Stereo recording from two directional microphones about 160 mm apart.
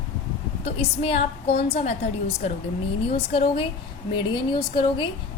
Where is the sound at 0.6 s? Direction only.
35° left (ahead or behind).